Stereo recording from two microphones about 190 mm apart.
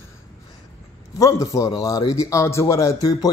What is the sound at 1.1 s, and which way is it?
A man's voice, 15° left (ahead or behind).